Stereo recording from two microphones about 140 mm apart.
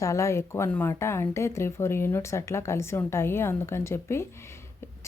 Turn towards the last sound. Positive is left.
turn(degrees=20)  # may be behind; listen again after turning